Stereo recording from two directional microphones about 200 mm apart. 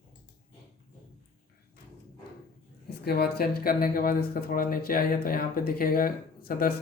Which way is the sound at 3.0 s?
50° left (ahead or behind).